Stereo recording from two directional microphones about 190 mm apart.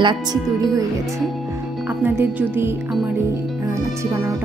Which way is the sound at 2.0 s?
10° right (ahead or behind).